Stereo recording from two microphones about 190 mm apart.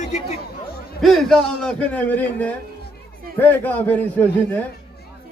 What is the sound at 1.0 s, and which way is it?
A man's voice, centre (ahead or behind).